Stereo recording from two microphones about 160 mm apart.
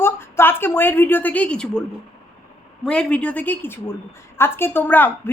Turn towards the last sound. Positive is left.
turn(degrees=10)  # may be behind; listen again after turning